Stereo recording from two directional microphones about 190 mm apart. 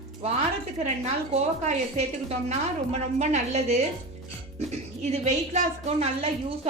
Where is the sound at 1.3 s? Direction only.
35° right (ahead or behind).